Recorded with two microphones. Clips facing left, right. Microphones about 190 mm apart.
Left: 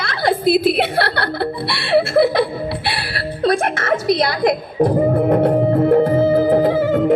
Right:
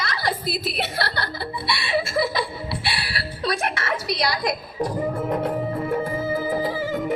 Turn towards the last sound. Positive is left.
turn(degrees=60)  # may be behind; listen again after turning